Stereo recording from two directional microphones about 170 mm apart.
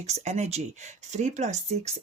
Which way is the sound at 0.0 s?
40° right (ahead or behind).